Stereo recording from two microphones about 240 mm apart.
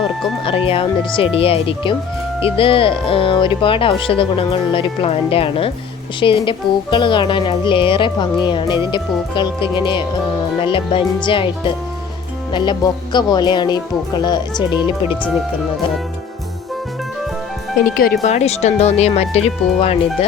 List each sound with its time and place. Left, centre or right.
0.4 s speech: left
14.8 s speech: centre
18.2 s speech: left